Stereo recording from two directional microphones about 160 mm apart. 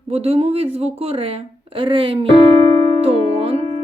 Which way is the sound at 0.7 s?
40° right (ahead or behind).